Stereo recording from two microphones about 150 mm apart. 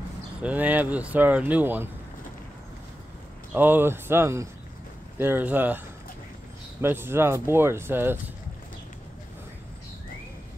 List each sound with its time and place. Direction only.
0.4 s speech: 10° right (ahead or behind)
3.5 s speech: 15° right (ahead or behind)
6.8 s speech: 15° right (ahead or behind)